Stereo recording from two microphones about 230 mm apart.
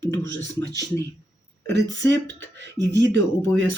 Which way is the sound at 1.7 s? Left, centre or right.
Right.